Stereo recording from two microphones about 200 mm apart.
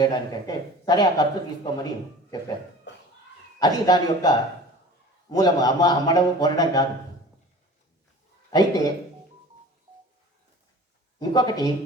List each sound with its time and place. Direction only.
0.0 s speech: 20° left (ahead or behind)
2.9 s a sound: 60° left (ahead or behind)
3.6 s speech: 20° left (ahead or behind)
8.4 s a man's voice: 20° left (ahead or behind)
11.2 s speech: 20° left (ahead or behind)